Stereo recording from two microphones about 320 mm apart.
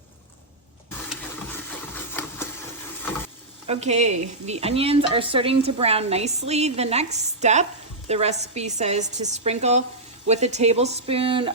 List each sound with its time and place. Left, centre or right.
0.9 s printer: centre
3.7 s speech: centre